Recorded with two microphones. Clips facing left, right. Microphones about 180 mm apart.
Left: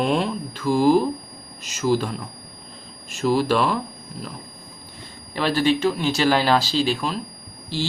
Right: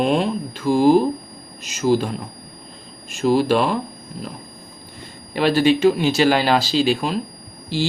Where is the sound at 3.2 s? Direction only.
25° right (ahead or behind).